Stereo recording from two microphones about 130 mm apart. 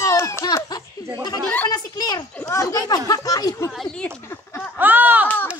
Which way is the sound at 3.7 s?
5° left (ahead or behind).